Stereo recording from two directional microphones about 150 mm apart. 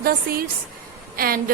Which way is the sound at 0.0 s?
80° right.